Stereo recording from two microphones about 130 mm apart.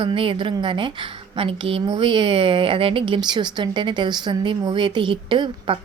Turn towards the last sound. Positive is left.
turn(degrees=-40)  # may be behind; listen again after turning